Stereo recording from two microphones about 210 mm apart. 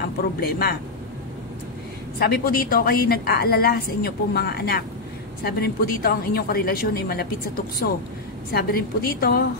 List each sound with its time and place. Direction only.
0.4 s a woman's voice: 45° left (ahead or behind)
2.1 s a woman's voice: 50° left (ahead or behind)